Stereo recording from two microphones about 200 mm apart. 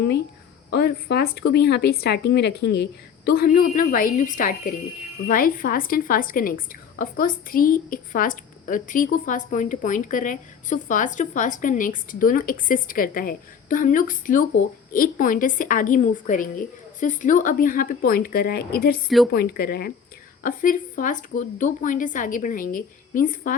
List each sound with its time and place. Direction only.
0.7 s a woman's voice: 55° left (ahead or behind)
19.0 s speech: centre (ahead or behind)
19.3 s a woman's voice: 50° left (ahead or behind)